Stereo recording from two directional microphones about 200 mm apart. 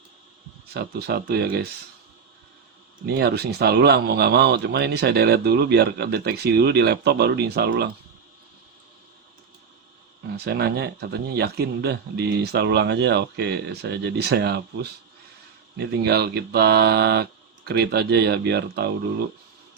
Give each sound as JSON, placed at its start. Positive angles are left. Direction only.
{"t": 0.7, "sound": "speech", "side_deg": -50}
{"t": 3.2, "sound": "speech", "side_deg": -50}
{"t": 10.3, "sound": "speech", "side_deg": -55}